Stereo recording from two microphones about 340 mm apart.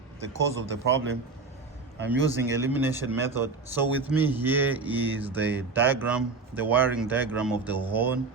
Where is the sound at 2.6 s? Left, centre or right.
Centre.